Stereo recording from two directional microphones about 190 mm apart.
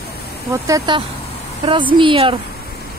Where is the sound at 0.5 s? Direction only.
15° right (ahead or behind).